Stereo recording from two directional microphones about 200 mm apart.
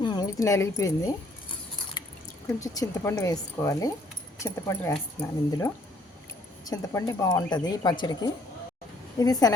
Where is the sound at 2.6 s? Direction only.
15° left (ahead or behind).